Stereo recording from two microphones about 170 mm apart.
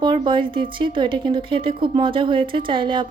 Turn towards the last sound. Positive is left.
turn(degrees=-30)  # may be behind; listen again after turning